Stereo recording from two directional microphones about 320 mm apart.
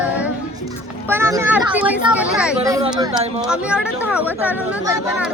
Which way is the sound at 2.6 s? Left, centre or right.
Centre.